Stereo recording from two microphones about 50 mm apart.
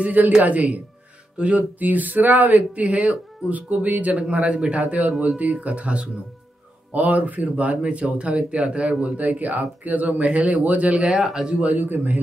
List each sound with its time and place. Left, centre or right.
0.0 s a man's voice: right
11.1 s speech: centre
11.6 s a man's voice: right